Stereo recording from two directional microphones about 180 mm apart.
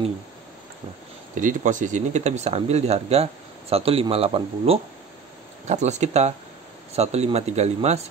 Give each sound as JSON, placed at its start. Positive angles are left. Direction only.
{"t": 1.3, "sound": "speech", "side_deg": -45}